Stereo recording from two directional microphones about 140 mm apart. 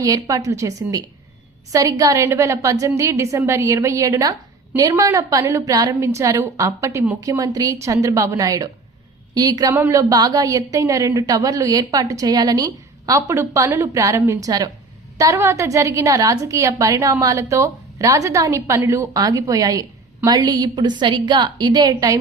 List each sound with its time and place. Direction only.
0.0 s a woman's voice: 25° right (ahead or behind)